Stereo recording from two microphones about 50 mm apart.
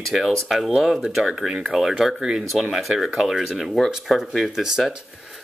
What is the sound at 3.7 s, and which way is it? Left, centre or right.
Speech, centre.